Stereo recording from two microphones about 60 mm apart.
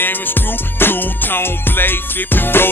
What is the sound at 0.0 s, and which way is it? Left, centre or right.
Music, left.